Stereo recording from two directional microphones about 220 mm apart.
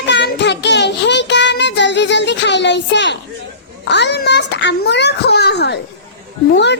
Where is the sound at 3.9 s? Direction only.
50° left (ahead or behind).